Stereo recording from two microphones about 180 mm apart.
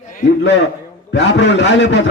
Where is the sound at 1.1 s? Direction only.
75° left (ahead or behind).